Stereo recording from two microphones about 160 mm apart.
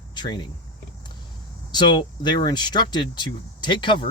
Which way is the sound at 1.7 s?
30° left (ahead or behind).